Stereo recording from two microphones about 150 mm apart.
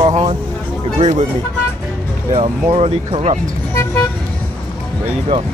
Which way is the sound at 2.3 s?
40° right (ahead or behind).